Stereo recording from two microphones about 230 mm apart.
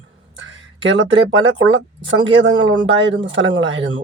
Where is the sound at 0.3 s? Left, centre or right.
Right.